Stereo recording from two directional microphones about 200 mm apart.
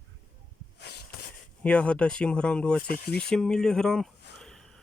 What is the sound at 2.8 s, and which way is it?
Speech, 50° left (ahead or behind).